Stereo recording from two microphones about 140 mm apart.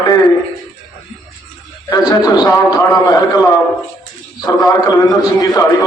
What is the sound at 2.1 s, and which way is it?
A man's voice, 30° left (ahead or behind).